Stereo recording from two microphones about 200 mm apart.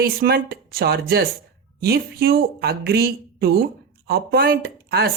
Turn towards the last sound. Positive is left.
turn(degrees=-50)  # may be behind; listen again after turning